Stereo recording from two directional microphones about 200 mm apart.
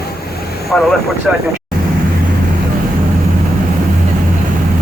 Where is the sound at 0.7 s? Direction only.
5° left (ahead or behind).